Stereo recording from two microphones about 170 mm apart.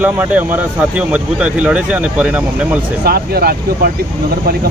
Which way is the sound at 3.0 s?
65° right (ahead or behind).